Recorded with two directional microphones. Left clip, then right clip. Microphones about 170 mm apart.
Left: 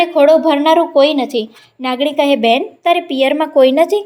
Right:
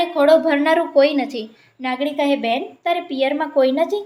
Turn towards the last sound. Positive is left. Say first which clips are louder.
# left 7 dB
turn(degrees=45)  # may be behind; listen again after turning